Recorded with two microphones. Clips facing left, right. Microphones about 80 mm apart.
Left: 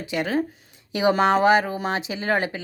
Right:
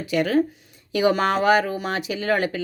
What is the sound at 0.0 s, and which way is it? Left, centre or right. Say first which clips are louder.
Speech: right 4 dB; left.